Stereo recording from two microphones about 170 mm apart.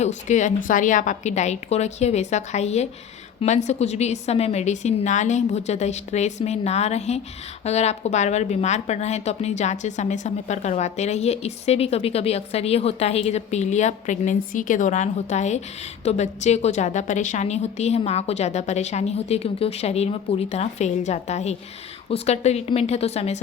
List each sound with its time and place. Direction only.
0.0 s a woman's voice: 45° left (ahead or behind)